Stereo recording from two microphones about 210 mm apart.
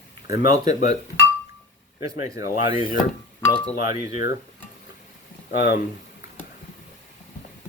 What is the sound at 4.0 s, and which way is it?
Speech, 40° left (ahead or behind).